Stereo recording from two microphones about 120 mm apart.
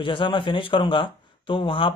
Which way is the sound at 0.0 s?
45° left (ahead or behind).